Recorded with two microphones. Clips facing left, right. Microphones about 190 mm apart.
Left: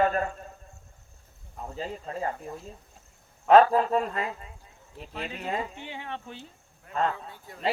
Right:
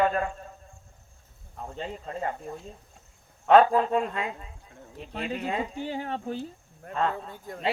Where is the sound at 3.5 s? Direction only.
35° left (ahead or behind).